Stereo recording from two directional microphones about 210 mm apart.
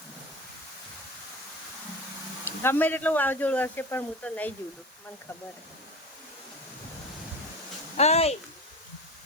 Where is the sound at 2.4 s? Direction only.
10° left (ahead or behind).